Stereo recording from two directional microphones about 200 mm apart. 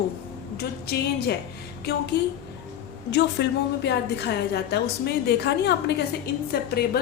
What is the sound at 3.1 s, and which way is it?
A woman's voice, 60° left (ahead or behind).